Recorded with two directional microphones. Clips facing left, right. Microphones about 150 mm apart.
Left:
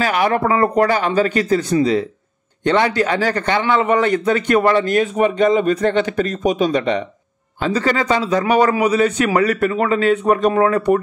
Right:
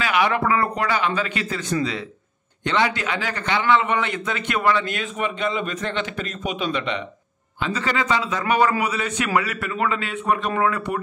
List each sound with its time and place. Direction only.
0.0 s a man's voice: 40° left (ahead or behind)